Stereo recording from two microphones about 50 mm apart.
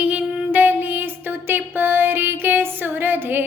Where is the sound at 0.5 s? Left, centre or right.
Right.